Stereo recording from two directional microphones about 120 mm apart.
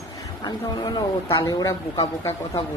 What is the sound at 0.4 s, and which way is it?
A woman's voice, 35° left (ahead or behind).